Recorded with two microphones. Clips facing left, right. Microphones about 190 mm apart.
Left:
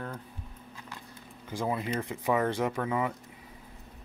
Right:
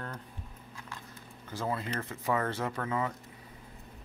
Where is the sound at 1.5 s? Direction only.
15° left (ahead or behind).